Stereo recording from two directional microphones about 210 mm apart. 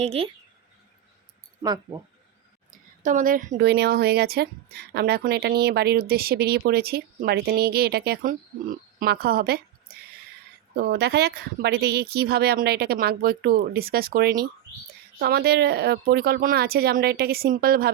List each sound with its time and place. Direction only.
0.0 s speech: 30° right (ahead or behind)
1.6 s speech: 20° right (ahead or behind)
2.6 s a woman's voice: 40° right (ahead or behind)